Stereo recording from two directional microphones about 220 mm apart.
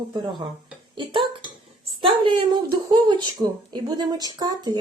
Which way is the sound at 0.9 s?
20° right (ahead or behind).